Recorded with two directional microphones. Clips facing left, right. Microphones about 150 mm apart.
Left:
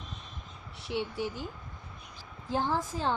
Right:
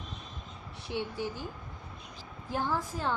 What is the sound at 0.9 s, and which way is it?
Speech, 15° left (ahead or behind).